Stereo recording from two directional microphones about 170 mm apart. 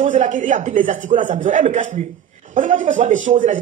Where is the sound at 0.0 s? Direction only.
50° right (ahead or behind).